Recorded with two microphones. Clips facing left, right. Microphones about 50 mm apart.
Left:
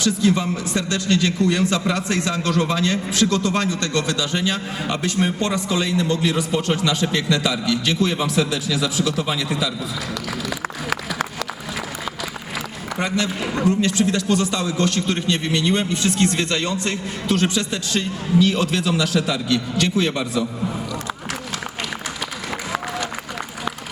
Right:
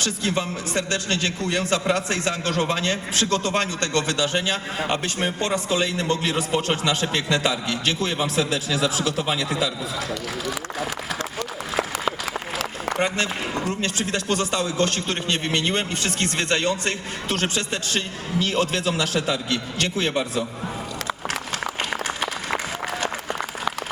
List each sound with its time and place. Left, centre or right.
0.0 s a man's voice: right
13.8 s a man's voice: right